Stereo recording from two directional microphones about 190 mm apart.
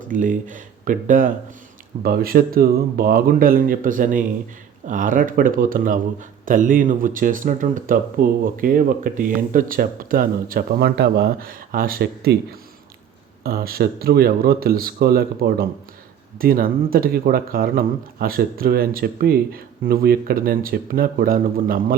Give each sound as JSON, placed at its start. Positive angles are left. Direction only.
{"t": 0.1, "sound": "speech", "side_deg": -45}